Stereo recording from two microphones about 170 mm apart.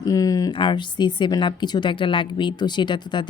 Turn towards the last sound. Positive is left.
turn(degrees=25)  # may be behind; listen again after turning